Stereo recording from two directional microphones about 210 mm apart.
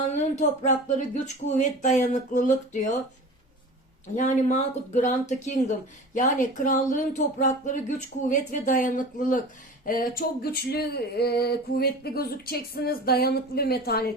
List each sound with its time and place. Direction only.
0.1 s speech: 35° left (ahead or behind)
4.1 s speech: 35° left (ahead or behind)
9.8 s a sound: 40° left (ahead or behind)